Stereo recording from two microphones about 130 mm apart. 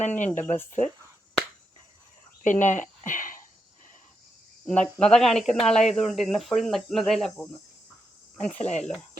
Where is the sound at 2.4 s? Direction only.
75° left (ahead or behind).